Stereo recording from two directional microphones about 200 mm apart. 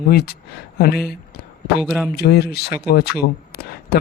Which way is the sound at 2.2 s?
55° left (ahead or behind).